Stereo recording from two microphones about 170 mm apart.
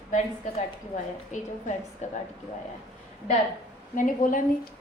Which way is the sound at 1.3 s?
45° left (ahead or behind).